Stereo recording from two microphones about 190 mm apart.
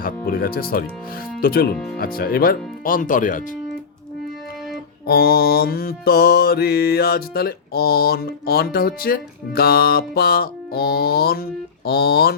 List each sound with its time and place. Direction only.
0.0 s mantra: 50° left (ahead or behind)
5.0 s mantra: 55° left (ahead or behind)